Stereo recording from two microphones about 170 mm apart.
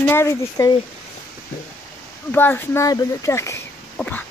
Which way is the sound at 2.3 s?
10° left (ahead or behind).